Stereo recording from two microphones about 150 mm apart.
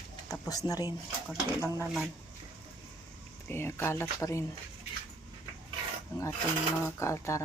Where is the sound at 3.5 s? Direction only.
15° left (ahead or behind).